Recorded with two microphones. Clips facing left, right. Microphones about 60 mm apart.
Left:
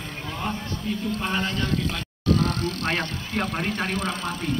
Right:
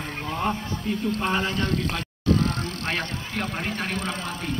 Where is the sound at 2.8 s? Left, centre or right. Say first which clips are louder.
Left 2 dB; centre.